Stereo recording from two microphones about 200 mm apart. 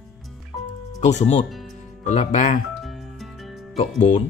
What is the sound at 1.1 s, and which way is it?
Speech, 35° left (ahead or behind).